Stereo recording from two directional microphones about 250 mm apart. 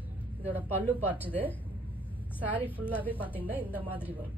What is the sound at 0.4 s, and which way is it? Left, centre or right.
Speech, centre.